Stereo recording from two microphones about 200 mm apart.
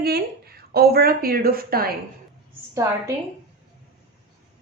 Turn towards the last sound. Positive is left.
turn(degrees=-15)  # may be behind; listen again after turning